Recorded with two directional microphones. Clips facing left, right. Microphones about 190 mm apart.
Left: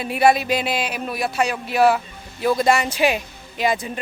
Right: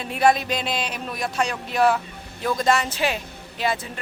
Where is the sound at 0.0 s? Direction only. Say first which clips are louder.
Left 3 dB; 10° left (ahead or behind).